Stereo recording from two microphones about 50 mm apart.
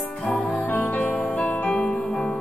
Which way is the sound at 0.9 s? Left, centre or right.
Left.